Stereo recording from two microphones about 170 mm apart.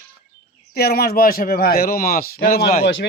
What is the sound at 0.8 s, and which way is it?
A man's voice, 65° left (ahead or behind).